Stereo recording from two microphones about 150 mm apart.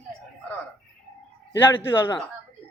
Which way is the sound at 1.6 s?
15° left (ahead or behind).